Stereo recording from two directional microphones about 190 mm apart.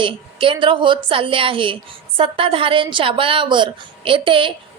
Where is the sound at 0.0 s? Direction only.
25° right (ahead or behind).